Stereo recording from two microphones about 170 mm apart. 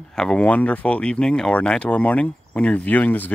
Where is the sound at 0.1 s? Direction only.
5° left (ahead or behind).